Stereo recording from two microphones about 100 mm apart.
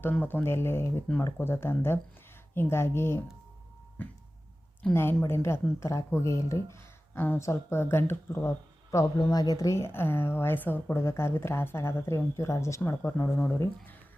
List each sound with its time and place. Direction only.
0.0 s a woman's voice: 20° left (ahead or behind)
4.9 s a woman's voice: 25° left (ahead or behind)
9.3 s a woman's voice: 40° left (ahead or behind); by 13.6 s 20° left (ahead or behind)